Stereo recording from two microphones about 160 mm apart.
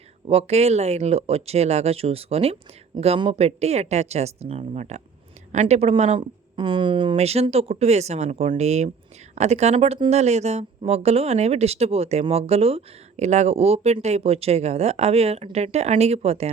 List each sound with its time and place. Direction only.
0.3 s speech: 40° right (ahead or behind)